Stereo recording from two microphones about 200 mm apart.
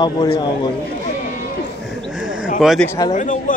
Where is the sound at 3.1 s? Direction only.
40° left (ahead or behind).